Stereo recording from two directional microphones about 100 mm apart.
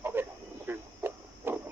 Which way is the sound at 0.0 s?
20° right (ahead or behind).